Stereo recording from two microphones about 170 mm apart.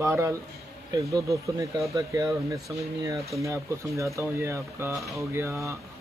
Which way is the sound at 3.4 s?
15° right (ahead or behind).